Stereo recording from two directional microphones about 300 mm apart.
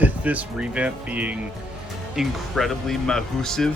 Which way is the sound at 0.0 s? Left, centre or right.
Centre.